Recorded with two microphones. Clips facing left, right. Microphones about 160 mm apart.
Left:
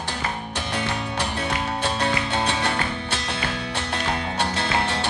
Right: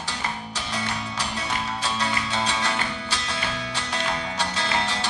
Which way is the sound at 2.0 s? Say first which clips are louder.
Left 2 dB; 55° left (ahead or behind).